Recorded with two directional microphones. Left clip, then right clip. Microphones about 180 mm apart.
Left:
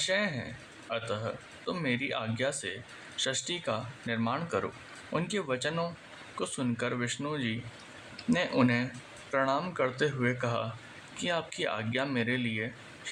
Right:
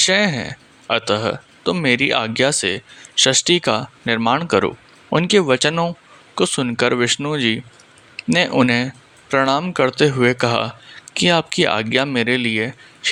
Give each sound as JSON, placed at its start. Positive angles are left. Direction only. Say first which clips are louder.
{"t": 0.0, "sound": "speech", "louder": "right 14 dB", "side_deg": -50}